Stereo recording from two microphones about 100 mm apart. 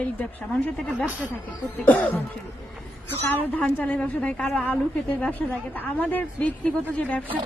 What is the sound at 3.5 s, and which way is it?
A woman's voice, 15° left (ahead or behind).